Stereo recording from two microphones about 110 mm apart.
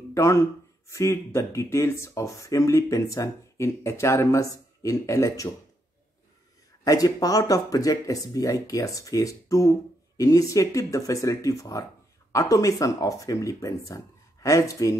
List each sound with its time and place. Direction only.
0.1 s speech: 25° left (ahead or behind)
6.8 s speech: 35° left (ahead or behind)